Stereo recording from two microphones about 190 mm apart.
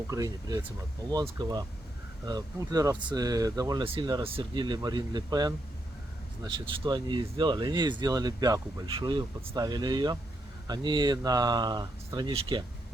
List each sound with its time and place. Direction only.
0.1 s speech: 20° right (ahead or behind)